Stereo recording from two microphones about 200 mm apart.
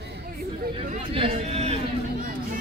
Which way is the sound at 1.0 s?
30° right (ahead or behind).